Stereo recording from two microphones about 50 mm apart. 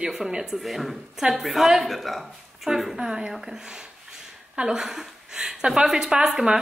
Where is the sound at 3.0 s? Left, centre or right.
Centre.